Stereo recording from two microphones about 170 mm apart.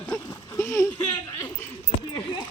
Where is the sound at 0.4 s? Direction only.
15° left (ahead or behind).